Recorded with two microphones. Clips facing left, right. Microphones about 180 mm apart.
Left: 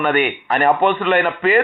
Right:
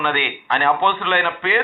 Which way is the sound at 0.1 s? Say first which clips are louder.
Left 5 dB; 45° left (ahead or behind).